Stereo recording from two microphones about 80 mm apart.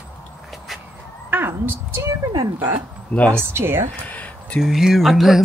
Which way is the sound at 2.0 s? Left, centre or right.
Right.